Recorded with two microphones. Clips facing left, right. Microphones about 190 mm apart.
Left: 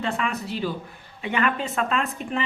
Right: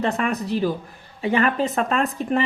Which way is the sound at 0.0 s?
40° right (ahead or behind).